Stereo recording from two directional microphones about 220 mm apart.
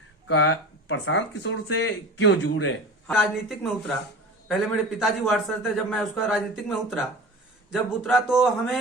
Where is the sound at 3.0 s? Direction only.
Centre (ahead or behind).